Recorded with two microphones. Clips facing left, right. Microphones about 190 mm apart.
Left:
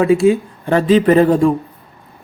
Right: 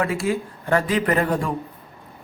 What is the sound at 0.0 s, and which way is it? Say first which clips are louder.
Speech: left 11 dB; 25° left (ahead or behind).